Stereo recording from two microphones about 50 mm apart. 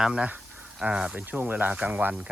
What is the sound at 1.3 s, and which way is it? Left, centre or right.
Speech, right.